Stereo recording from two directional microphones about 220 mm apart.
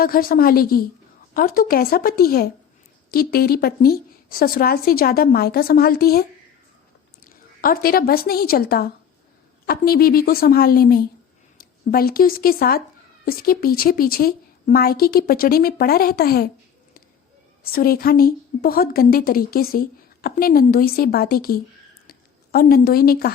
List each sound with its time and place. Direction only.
0.0 s a woman's voice: 40° left (ahead or behind)
7.3 s speech: 40° left (ahead or behind)
17.7 s speech: 40° left (ahead or behind)